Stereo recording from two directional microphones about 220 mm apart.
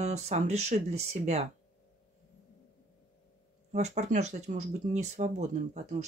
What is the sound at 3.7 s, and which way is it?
Speech, 30° right (ahead or behind).